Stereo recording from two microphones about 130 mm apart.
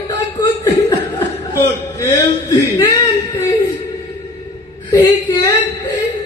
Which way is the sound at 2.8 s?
25° left (ahead or behind).